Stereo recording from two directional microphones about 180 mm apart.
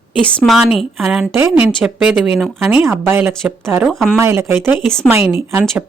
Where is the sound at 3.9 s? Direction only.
Centre (ahead or behind).